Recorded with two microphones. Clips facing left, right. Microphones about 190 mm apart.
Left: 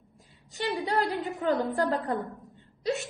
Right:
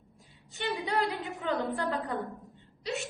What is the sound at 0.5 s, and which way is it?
A woman's voice, 35° left (ahead or behind).